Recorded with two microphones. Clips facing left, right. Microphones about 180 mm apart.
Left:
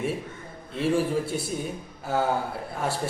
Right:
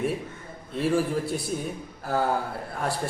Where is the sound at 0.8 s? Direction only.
Centre (ahead or behind).